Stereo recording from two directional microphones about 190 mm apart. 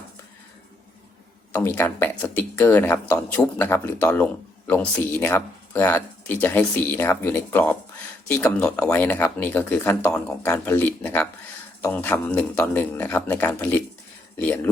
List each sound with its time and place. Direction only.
1.6 s speech: 10° left (ahead or behind)